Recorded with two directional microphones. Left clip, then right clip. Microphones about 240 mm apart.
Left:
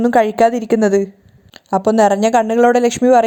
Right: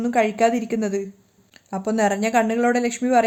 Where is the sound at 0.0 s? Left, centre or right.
Left.